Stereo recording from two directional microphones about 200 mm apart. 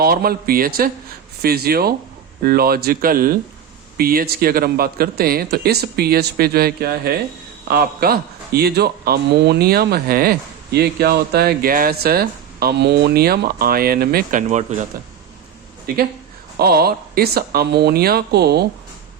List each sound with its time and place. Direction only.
0.0 s a man's voice: 50° right (ahead or behind)
16.6 s a man's voice: 50° right (ahead or behind)